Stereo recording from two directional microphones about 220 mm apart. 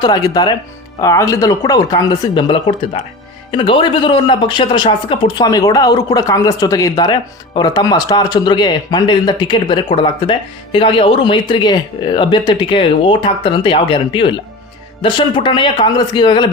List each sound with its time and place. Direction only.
0.0 s speech: 20° left (ahead or behind)